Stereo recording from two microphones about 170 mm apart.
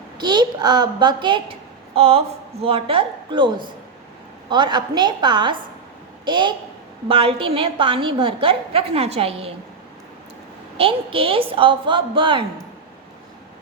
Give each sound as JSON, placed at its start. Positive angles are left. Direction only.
{"t": 0.2, "sound": "a woman's voice", "side_deg": -25}
{"t": 10.8, "sound": "a woman's voice", "side_deg": -30}